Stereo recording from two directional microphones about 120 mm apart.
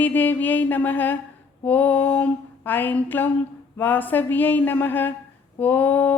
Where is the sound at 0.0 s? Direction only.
15° left (ahead or behind).